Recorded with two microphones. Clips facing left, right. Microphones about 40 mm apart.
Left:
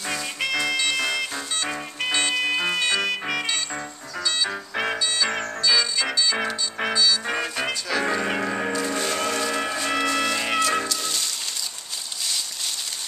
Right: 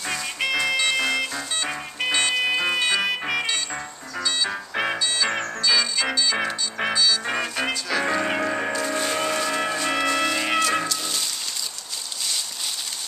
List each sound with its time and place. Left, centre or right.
0.0 s music: centre